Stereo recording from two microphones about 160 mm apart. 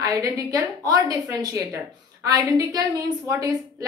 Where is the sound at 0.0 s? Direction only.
20° right (ahead or behind).